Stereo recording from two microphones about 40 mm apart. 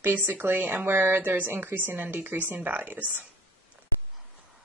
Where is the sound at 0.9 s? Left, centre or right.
Right.